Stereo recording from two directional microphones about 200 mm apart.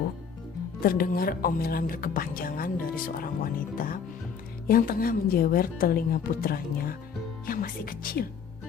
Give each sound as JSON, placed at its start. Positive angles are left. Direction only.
{"t": 0.8, "sound": "a woman's voice", "side_deg": 45}